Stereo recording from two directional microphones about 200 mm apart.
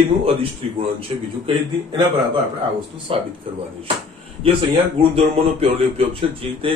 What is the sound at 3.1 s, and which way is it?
Speech, 25° right (ahead or behind).